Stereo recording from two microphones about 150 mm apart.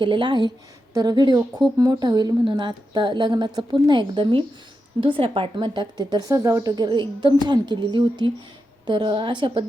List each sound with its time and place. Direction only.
0.0 s a woman's voice: 30° right (ahead or behind)